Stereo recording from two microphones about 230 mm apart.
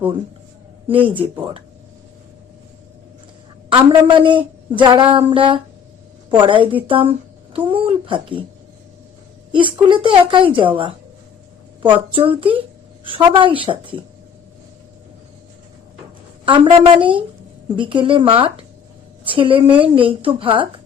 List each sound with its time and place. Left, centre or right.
0.9 s a woman's voice: right
3.7 s a woman's voice: right
9.5 s a woman's voice: right
12.1 s a woman's voice: right
16.5 s a woman's voice: right